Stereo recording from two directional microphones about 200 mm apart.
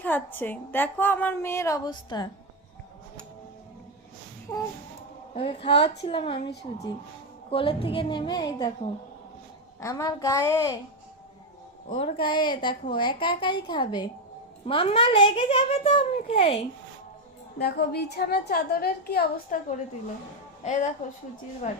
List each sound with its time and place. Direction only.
0.0 s a woman's voice: 10° left (ahead or behind)
4.5 s a woman's voice: 20° left (ahead or behind)
5.3 s a woman's voice: 30° left (ahead or behind)
7.5 s a woman's voice: 25° left (ahead or behind)
11.9 s a woman's voice: 30° left (ahead or behind)
17.6 s a woman's voice: 55° left (ahead or behind)
20.7 s a woman's voice: 35° left (ahead or behind)